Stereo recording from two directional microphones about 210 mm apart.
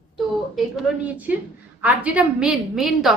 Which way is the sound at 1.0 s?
5° right (ahead or behind).